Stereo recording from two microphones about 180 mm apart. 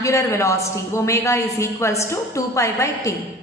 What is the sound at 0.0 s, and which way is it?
A woman's voice, 15° left (ahead or behind).